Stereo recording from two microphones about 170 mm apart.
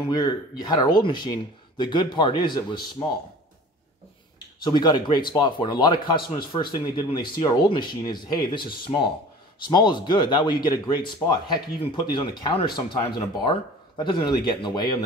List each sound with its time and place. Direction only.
0.1 s speech: 25° left (ahead or behind)
4.6 s speech: 25° left (ahead or behind)